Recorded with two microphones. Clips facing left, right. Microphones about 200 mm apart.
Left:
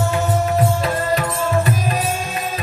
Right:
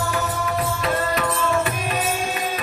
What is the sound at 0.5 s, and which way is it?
Music, 30° left (ahead or behind).